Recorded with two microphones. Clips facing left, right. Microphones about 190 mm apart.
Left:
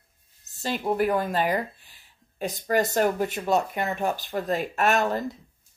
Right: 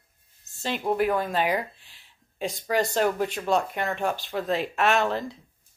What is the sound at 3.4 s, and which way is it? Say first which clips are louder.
Speech: left 1 dB; 5° left (ahead or behind).